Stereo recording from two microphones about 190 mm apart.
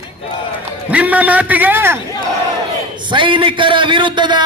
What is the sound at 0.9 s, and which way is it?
A man's voice, 5° right (ahead or behind).